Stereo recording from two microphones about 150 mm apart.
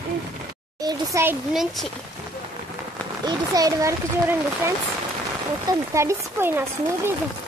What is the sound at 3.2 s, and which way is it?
Speech, 25° right (ahead or behind).